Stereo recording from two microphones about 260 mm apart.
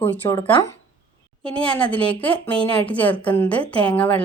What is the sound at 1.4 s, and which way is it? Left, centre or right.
A woman's voice, centre.